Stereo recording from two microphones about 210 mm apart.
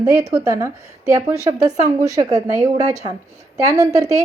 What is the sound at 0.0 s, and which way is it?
A woman's voice, 15° right (ahead or behind).